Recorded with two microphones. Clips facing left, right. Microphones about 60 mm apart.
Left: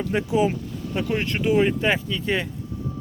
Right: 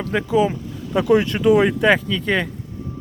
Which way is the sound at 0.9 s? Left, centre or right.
Right.